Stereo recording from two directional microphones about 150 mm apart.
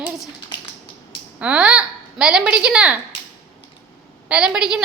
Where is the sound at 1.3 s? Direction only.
5° right (ahead or behind).